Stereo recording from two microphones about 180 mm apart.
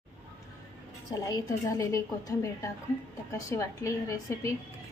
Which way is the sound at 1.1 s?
20° left (ahead or behind).